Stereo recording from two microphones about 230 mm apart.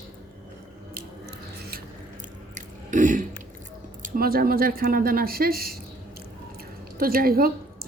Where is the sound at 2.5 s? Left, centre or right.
Right.